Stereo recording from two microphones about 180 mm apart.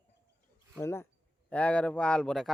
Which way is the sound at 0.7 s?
15° left (ahead or behind).